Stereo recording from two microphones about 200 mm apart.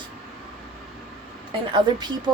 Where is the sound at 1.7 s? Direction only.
20° right (ahead or behind).